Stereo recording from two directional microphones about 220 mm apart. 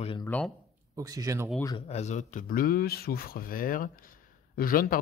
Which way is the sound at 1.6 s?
25° left (ahead or behind).